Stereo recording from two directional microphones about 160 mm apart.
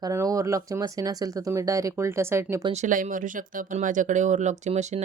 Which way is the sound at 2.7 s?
55° right (ahead or behind).